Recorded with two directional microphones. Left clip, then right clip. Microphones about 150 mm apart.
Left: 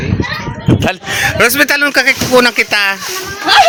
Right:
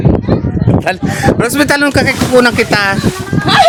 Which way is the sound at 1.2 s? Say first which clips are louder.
Left 1 dB; 15° right (ahead or behind).